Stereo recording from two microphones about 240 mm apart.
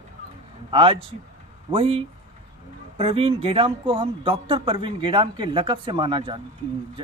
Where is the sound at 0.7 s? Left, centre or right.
Right.